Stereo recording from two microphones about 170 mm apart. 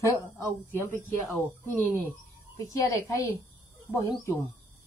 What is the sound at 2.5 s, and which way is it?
Speech, 20° left (ahead or behind).